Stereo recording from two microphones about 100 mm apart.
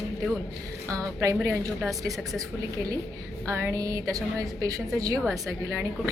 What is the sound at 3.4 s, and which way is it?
A woman's voice, 30° right (ahead or behind).